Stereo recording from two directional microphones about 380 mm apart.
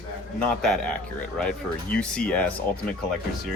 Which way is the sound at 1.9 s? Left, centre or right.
Centre.